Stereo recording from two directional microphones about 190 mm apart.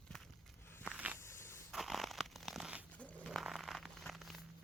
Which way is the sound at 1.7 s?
Centre (ahead or behind).